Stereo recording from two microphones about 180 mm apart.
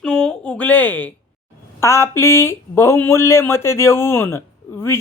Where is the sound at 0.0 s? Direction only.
5° left (ahead or behind).